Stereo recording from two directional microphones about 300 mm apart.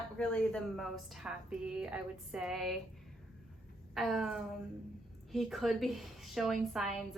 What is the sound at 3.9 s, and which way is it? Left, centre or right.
A woman's voice, centre.